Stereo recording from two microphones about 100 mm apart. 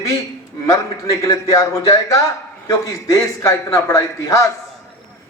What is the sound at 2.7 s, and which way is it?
A man's voice, 35° left (ahead or behind).